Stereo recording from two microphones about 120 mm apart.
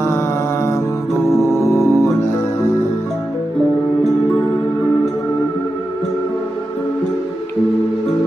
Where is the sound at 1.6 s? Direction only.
25° left (ahead or behind).